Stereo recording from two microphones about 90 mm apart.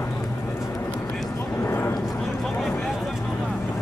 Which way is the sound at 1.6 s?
25° left (ahead or behind).